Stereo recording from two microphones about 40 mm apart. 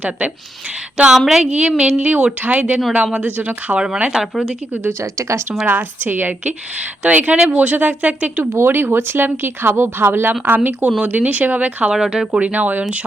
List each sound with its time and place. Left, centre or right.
0.9 s a sound: right
1.8 s speech: right
3.8 s a sound: right
4.1 s speech: centre
5.6 s a woman's voice: right
7.0 s speech: right
8.4 s speech: right
10.4 s a woman's voice: right
11.9 s speech: centre
12.4 s speech: right